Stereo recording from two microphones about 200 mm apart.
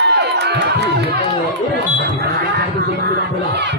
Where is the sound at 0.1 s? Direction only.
55° right (ahead or behind).